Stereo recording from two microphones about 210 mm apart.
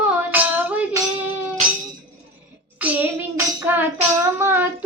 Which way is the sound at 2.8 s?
10° right (ahead or behind).